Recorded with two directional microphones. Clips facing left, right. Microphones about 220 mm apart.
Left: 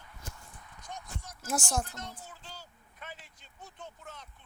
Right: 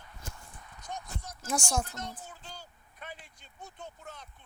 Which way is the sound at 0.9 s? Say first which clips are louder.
Right 3 dB; 40° right (ahead or behind).